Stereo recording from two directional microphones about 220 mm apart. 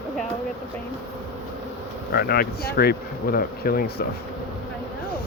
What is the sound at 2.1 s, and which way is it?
Speech, 45° left (ahead or behind).